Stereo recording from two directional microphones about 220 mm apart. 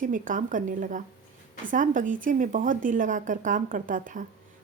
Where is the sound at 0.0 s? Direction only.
35° right (ahead or behind).